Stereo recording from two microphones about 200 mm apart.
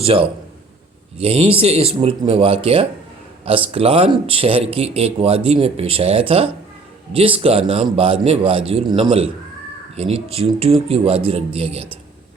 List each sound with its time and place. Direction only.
0.1 s speech: 25° right (ahead or behind)